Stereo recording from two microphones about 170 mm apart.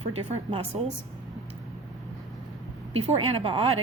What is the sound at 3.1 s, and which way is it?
Speech, 35° right (ahead or behind).